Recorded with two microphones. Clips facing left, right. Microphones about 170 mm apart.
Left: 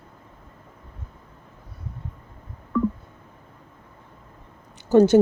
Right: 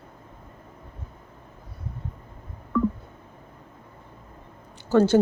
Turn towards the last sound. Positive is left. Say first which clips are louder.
# left 4 dB
turn(degrees=20)  # may be behind; listen again after turning